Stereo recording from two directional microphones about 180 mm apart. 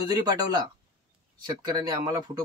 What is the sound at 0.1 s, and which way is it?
Speech, 20° right (ahead or behind).